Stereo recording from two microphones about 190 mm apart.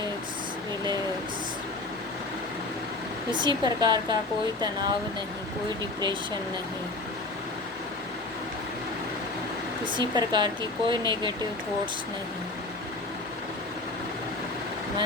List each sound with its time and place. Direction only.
3.3 s speech: 25° right (ahead or behind)
9.8 s speech: 25° right (ahead or behind)